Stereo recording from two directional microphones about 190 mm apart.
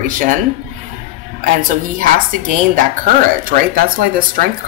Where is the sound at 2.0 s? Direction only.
45° right (ahead or behind).